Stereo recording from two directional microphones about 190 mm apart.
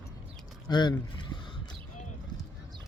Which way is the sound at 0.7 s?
25° left (ahead or behind).